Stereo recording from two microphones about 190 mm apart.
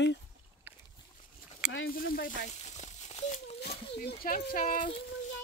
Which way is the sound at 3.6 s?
55° left (ahead or behind).